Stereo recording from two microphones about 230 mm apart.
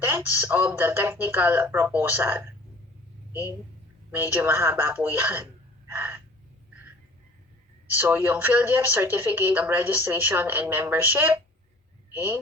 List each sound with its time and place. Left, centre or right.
0.0 s a woman's voice: centre
4.1 s a woman's voice: centre
5.9 s gasp: centre
7.9 s a woman's voice: centre